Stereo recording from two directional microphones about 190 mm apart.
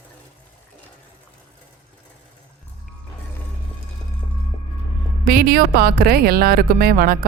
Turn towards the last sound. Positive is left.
turn(degrees=-50)  # may be behind; listen again after turning